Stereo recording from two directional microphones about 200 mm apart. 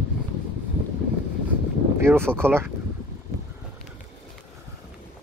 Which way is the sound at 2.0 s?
10° right (ahead or behind).